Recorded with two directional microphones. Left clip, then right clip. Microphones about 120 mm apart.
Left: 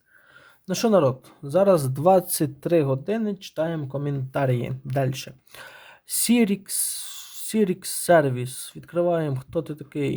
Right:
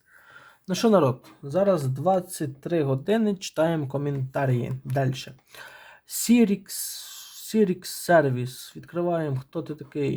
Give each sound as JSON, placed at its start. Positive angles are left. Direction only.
{"t": 0.7, "sound": "speech", "side_deg": 25}
{"t": 1.5, "sound": "speech", "side_deg": 55}
{"t": 2.7, "sound": "speech", "side_deg": 30}
{"t": 3.1, "sound": "speech", "side_deg": 5}
{"t": 4.0, "sound": "speech", "side_deg": 30}